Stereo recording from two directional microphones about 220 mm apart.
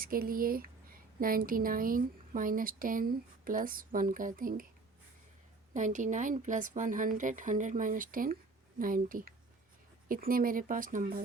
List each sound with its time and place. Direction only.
0.0 s speech: 40° right (ahead or behind)
5.7 s speech: 35° right (ahead or behind)